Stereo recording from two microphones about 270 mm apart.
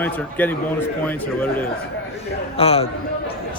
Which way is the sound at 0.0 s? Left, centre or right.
Centre.